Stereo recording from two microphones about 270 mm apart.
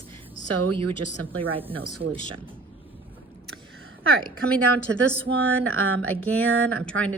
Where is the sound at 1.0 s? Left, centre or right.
Right.